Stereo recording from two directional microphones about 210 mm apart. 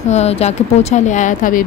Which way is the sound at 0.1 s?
30° left (ahead or behind).